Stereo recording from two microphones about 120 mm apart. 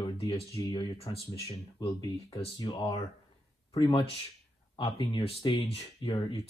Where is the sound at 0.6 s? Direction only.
30° left (ahead or behind).